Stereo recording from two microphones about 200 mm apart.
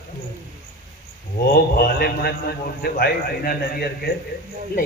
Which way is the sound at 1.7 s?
50° left (ahead or behind).